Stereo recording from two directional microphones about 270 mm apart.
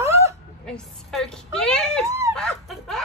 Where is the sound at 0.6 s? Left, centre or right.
Centre.